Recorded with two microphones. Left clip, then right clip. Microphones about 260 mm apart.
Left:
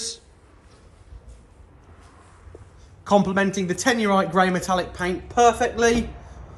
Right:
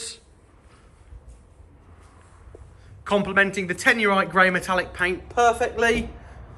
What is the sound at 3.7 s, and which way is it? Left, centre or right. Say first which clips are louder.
Speech: even; centre.